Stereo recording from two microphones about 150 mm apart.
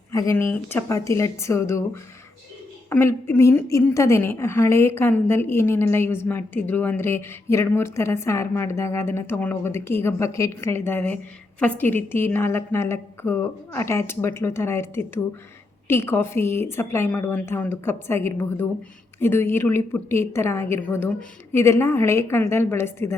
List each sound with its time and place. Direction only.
0.1 s a woman's voice: 20° left (ahead or behind)